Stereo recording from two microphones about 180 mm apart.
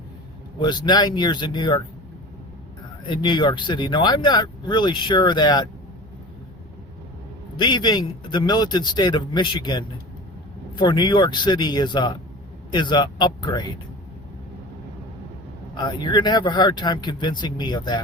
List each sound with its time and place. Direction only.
0.6 s speech: 25° left (ahead or behind)
3.1 s speech: 25° left (ahead or behind)
7.5 s speech: 25° left (ahead or behind)
15.7 s speech: 25° left (ahead or behind)